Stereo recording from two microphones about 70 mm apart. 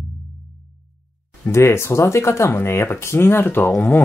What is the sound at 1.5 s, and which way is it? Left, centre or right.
Speech, left.